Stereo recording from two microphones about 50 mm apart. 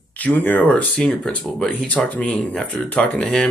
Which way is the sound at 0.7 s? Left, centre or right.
Left.